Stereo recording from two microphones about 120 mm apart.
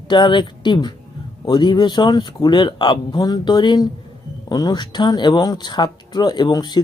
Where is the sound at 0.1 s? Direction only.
40° left (ahead or behind).